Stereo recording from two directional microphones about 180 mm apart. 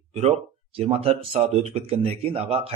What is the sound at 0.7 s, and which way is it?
Speech, 30° right (ahead or behind).